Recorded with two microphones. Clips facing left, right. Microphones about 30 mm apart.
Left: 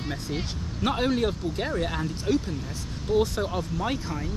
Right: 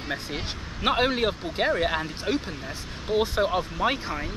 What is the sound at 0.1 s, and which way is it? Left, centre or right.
Speech, right.